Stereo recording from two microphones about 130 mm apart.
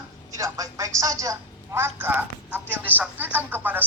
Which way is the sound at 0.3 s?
25° right (ahead or behind).